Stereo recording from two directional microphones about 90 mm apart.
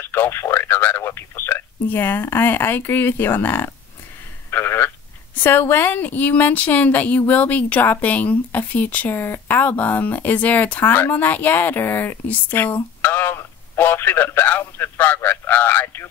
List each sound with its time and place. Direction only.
0.0 s a woman's voice: 25° left (ahead or behind)